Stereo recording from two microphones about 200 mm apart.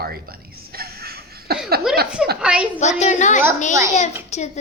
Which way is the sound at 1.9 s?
5° right (ahead or behind).